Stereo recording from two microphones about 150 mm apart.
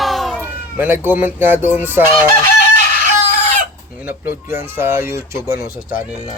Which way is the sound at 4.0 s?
15° right (ahead or behind).